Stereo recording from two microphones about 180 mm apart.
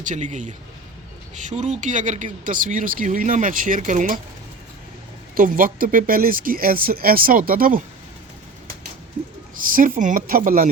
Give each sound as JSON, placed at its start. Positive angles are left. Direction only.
{"t": 0.0, "sound": "speech", "side_deg": -45}
{"t": 5.3, "sound": "speech", "side_deg": -50}
{"t": 9.6, "sound": "speech", "side_deg": -50}